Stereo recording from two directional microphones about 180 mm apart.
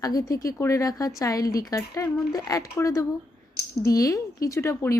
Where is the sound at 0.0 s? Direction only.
20° left (ahead or behind).